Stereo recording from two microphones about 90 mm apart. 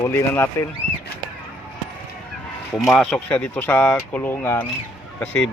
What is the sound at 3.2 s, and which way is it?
Speech, 15° left (ahead or behind).